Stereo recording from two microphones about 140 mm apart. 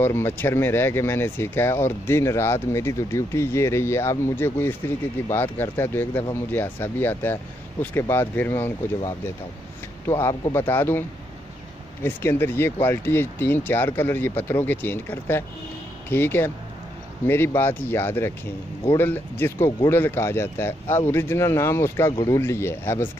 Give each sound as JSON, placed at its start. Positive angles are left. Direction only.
{"t": 0.0, "sound": "speech", "side_deg": 15}
{"t": 10.0, "sound": "speech", "side_deg": 15}
{"t": 17.6, "sound": "speech", "side_deg": 15}